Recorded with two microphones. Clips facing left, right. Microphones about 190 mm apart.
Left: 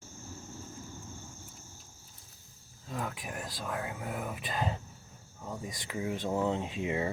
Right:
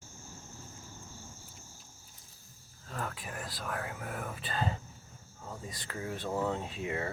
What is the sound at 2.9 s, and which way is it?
Speech, 15° left (ahead or behind).